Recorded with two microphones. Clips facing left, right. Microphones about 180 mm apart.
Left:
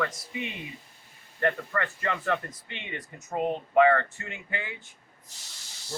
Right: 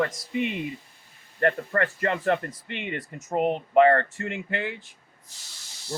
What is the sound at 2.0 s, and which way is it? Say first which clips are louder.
Speech: right 4 dB; 50° right (ahead or behind).